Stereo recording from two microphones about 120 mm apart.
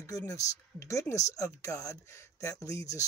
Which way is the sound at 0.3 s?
25° left (ahead or behind).